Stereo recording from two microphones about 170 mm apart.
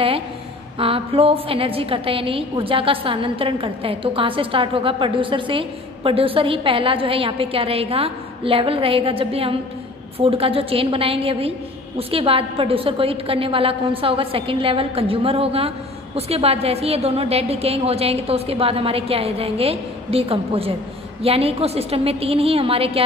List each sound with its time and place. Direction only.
0.7 s a woman's voice: 35° right (ahead or behind)